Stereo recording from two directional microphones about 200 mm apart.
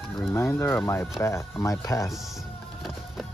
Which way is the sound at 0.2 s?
10° left (ahead or behind).